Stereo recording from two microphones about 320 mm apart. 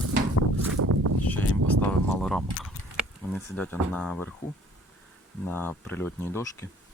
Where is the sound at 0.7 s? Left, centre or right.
Right.